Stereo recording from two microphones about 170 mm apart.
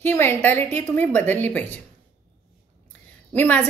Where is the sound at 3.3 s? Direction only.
10° left (ahead or behind).